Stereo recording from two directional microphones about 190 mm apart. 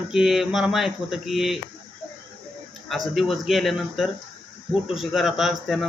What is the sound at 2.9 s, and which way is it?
Speech, centre (ahead or behind).